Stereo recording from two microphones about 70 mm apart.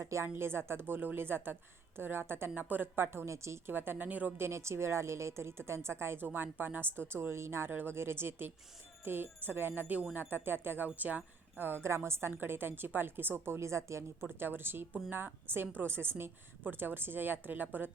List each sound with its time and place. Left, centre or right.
0.0 s a woman's voice: right
3.7 s speech: right
4.4 s a woman's voice: right
14.3 s a woman's voice: right